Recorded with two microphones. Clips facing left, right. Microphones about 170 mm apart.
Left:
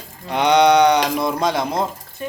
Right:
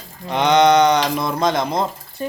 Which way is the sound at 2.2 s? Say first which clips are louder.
Right 3 dB; 35° right (ahead or behind).